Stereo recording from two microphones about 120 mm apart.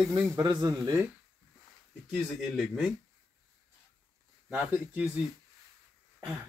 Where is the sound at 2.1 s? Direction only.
Centre (ahead or behind).